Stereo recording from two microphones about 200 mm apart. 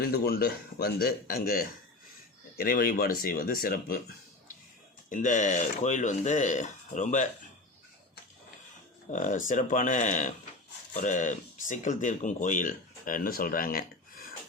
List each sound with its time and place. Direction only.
0.1 s speech: 50° left (ahead or behind)
5.0 s speech: 40° left (ahead or behind)
9.0 s speech: 40° left (ahead or behind)